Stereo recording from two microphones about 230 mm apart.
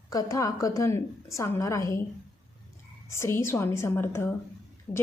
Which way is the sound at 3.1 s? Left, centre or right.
Centre.